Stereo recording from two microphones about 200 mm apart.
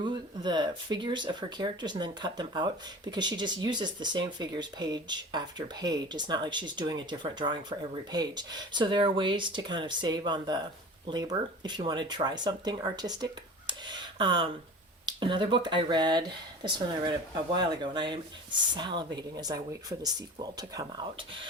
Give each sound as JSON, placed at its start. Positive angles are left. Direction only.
{"t": 0.0, "sound": "speech", "side_deg": -20}